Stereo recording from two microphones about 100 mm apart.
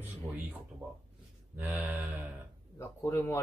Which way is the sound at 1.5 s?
15° right (ahead or behind).